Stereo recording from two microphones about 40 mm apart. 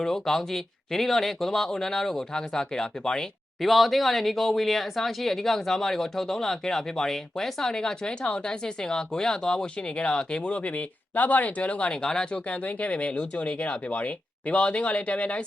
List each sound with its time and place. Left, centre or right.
0.0 s speech: centre
3.6 s speech: centre; by 10.8 s left
11.1 s speech: left
11.9 s speech: left
12.6 s speech: left